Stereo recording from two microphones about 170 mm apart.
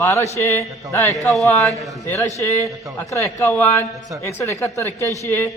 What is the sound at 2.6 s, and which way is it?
Speech, 20° right (ahead or behind).